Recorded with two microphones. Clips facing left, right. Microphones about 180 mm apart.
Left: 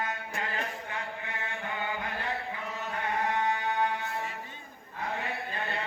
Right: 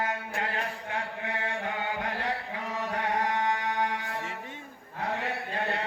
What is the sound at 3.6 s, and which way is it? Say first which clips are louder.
Music: even; 80° right.